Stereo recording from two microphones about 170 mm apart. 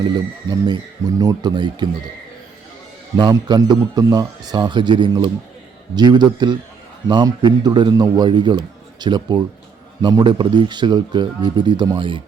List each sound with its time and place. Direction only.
0.7 s a man's voice: 20° right (ahead or behind)
3.2 s a man's voice: 25° right (ahead or behind)